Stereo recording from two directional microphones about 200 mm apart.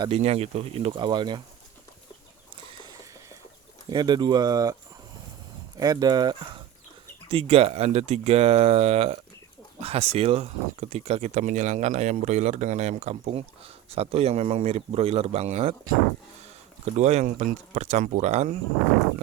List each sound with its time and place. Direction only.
0.0 s speech: 30° right (ahead or behind)
2.8 s a sound: 20° right (ahead or behind)
3.9 s speech: 20° right (ahead or behind)
16.8 s speech: 35° right (ahead or behind)